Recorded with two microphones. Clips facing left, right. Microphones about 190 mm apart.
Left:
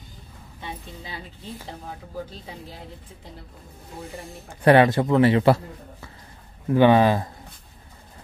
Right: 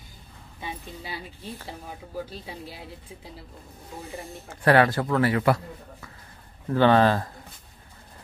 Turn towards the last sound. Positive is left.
turn(degrees=15)  # may be behind; listen again after turning